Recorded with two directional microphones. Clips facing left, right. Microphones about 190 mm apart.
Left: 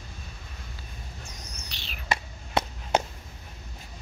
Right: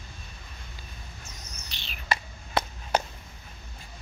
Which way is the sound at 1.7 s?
Centre (ahead or behind).